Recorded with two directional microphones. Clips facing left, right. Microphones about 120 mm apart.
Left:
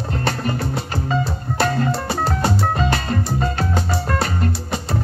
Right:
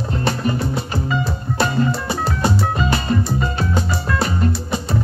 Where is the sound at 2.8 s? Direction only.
45° left (ahead or behind).